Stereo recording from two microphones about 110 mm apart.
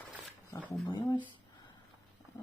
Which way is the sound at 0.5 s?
35° left (ahead or behind).